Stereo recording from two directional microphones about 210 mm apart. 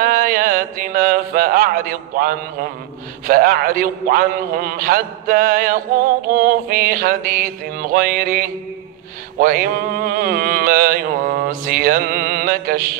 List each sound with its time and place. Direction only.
0.0 s a man's voice: 40° right (ahead or behind)